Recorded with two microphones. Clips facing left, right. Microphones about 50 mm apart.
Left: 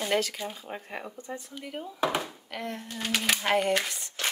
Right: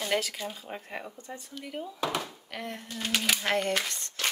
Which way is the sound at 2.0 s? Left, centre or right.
Centre.